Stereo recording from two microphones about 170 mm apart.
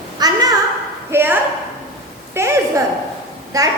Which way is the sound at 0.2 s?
20° right (ahead or behind).